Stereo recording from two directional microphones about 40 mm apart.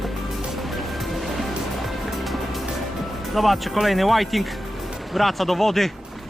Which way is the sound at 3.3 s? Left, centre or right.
Centre.